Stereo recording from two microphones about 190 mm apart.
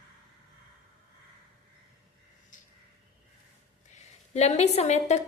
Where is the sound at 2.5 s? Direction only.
45° left (ahead or behind).